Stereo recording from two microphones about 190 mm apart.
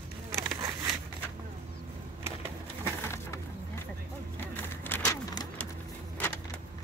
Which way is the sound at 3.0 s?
15° left (ahead or behind).